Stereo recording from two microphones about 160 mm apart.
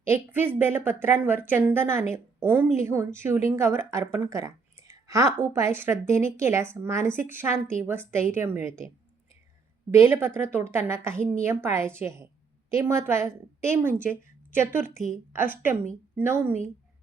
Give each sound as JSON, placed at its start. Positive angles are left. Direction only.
{"t": 0.0, "sound": "a woman's voice", "side_deg": -15}
{"t": 9.9, "sound": "a woman's voice", "side_deg": -15}
{"t": 14.8, "sound": "a woman's voice", "side_deg": 50}
{"t": 15.3, "sound": "a woman's voice", "side_deg": -15}